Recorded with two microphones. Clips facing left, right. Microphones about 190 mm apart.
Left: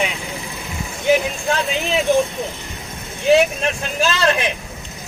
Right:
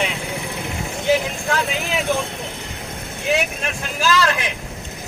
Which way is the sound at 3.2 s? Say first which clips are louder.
Left 7 dB; 30° left (ahead or behind).